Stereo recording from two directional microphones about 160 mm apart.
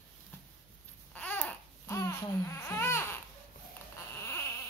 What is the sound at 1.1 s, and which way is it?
Babbling, 10° left (ahead or behind).